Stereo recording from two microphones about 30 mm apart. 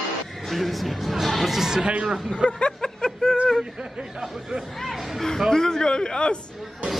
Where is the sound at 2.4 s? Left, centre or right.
Left.